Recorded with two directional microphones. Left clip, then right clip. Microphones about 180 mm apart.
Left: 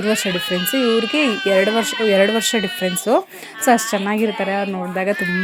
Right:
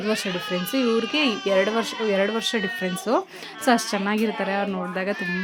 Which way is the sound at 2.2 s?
25° left (ahead or behind).